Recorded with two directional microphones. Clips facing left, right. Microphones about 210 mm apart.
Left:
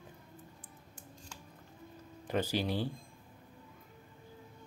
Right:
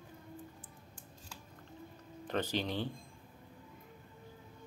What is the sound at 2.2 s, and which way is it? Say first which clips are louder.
Speech: left 2 dB; 10° left (ahead or behind).